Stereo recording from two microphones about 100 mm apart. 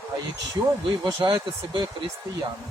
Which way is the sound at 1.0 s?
50° right (ahead or behind).